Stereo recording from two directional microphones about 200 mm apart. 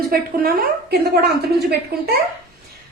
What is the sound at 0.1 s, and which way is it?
A woman's voice, 50° right (ahead or behind).